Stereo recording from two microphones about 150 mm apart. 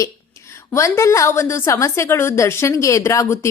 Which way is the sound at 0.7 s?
20° left (ahead or behind).